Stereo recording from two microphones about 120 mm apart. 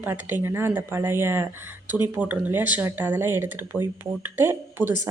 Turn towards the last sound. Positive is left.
turn(degrees=-20)  # may be behind; listen again after turning